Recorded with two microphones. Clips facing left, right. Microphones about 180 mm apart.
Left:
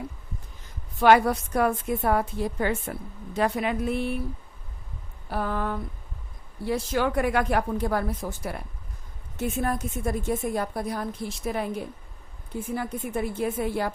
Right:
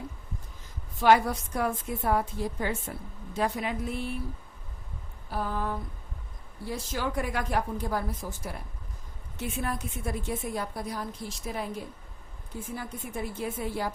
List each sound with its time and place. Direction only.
0.9 s a woman's voice: 65° left (ahead or behind)
5.3 s a sound: 65° left (ahead or behind)
6.7 s a woman's voice: 65° left (ahead or behind)
9.4 s a woman's voice: 45° left (ahead or behind)